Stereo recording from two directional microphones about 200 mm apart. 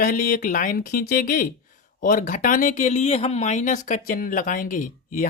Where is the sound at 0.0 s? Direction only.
45° left (ahead or behind).